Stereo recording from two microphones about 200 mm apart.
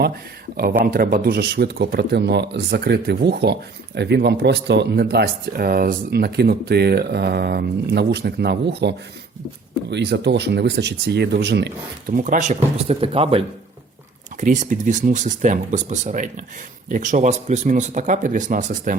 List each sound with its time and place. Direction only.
0.5 s speech: 50° right (ahead or behind)
12.1 s speech: 40° right (ahead or behind)
14.4 s speech: 40° right (ahead or behind)